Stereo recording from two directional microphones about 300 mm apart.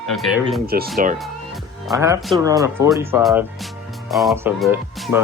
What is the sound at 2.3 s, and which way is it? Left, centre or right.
Speech, centre.